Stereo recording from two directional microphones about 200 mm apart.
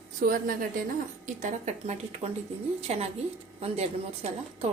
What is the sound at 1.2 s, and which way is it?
A woman's voice, 35° right (ahead or behind).